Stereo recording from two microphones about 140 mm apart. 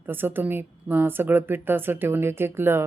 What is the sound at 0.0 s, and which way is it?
A woman's voice, 15° right (ahead or behind).